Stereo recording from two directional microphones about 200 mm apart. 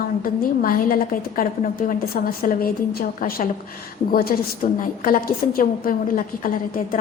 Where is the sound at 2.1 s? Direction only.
45° left (ahead or behind).